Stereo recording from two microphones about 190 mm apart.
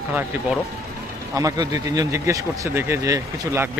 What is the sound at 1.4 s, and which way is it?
Speech, 20° right (ahead or behind).